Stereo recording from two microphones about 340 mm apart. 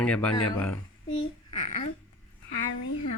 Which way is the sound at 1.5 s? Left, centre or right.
Centre.